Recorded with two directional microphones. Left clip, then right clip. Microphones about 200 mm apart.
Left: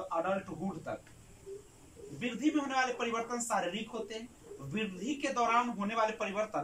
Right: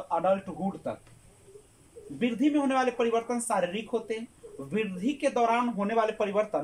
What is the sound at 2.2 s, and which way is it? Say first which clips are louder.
Speech: right 6 dB; 40° right (ahead or behind).